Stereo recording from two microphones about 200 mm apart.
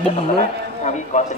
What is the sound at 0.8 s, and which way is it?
Speech, 35° left (ahead or behind).